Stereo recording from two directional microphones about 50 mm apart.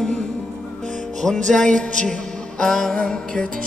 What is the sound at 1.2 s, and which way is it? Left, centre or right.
Music, centre.